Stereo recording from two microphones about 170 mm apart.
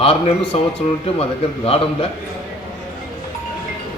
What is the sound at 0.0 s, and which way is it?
Speech, 35° left (ahead or behind).